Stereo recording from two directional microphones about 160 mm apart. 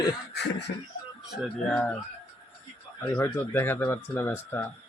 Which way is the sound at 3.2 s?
15° left (ahead or behind).